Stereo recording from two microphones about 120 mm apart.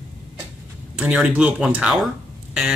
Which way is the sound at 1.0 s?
5° right (ahead or behind).